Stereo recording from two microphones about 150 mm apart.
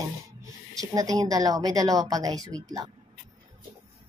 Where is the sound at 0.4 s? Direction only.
25° right (ahead or behind).